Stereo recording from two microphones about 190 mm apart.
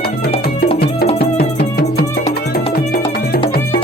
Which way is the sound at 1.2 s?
55° left (ahead or behind).